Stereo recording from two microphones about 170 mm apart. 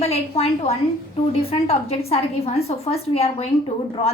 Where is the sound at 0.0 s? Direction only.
35° left (ahead or behind).